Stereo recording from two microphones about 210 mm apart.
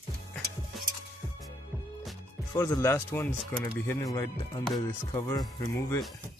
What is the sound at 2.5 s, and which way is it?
Speech, 15° left (ahead or behind).